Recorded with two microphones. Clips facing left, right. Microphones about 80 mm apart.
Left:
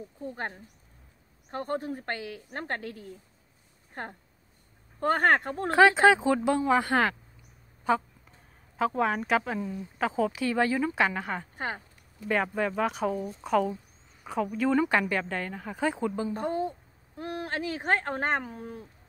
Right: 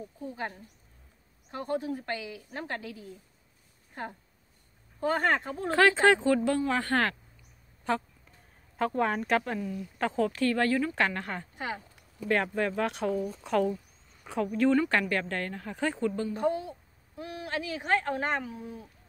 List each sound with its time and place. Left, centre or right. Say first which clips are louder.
1.5 s a woman's voice: even; left
5.7 s speech: left 3 dB; centre
9.6 s a woman's voice: left 1 dB; left
9.9 s speech: left 1 dB; centre
11.5 s speech: left 1 dB; left
12.3 s speech: even; centre
16.3 s speech: even; left